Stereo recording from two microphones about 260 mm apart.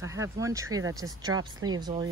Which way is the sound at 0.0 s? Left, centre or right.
Centre.